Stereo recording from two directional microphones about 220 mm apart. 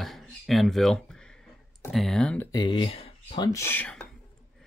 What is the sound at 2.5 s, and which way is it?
Speech, 20° left (ahead or behind).